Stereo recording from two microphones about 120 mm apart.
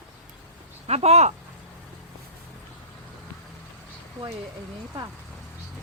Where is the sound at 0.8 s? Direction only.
60° right (ahead or behind).